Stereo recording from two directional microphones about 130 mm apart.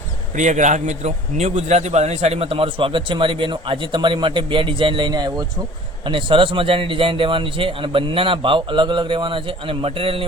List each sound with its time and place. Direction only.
0.3 s a man's voice: 70° right (ahead or behind); by 10.2 s 45° right (ahead or behind)